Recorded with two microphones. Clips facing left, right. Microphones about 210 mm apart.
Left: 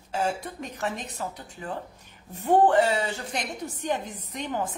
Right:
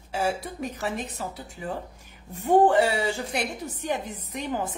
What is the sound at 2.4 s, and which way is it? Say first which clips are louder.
A woman's voice: right 1 dB; 10° right (ahead or behind).